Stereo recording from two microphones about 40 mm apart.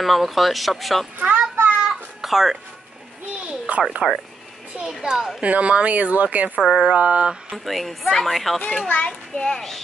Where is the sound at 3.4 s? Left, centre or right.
Right.